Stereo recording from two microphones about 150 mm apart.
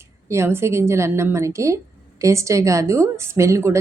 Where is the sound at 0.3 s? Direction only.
15° right (ahead or behind).